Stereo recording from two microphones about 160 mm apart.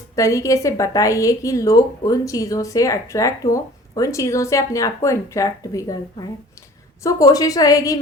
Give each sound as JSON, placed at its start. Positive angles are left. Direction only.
{"t": 0.2, "sound": "a woman's voice", "side_deg": 20}